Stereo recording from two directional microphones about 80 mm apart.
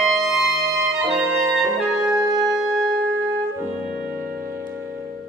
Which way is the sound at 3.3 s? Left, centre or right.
Right.